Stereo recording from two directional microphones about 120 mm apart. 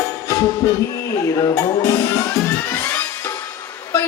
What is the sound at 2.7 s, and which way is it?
Music, 20° left (ahead or behind).